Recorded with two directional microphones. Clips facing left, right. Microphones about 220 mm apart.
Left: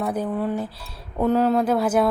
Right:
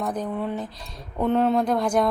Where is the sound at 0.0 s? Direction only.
10° left (ahead or behind).